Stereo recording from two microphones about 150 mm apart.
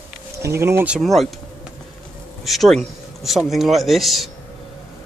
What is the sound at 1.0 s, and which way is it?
Speech, centre (ahead or behind).